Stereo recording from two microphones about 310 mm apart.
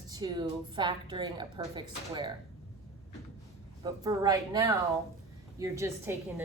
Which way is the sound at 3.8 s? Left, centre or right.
Centre.